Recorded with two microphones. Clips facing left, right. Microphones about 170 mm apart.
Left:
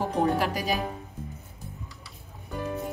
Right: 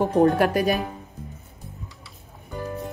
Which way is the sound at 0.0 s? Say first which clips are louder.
Right 7 dB; 60° right (ahead or behind).